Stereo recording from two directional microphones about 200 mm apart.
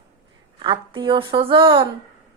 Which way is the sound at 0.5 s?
25° right (ahead or behind).